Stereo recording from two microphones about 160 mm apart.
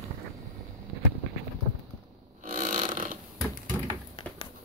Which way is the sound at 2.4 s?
50° right (ahead or behind).